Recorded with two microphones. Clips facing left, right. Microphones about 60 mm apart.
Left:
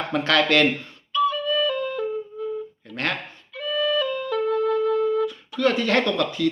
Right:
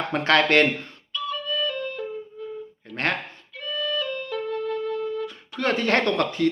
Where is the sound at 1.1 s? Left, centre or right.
Centre.